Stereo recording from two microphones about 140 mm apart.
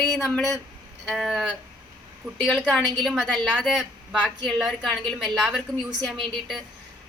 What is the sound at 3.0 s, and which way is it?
A woman's voice, centre (ahead or behind).